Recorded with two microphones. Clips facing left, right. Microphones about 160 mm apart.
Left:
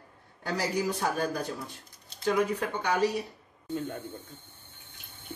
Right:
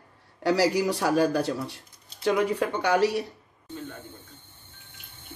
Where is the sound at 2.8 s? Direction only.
80° right.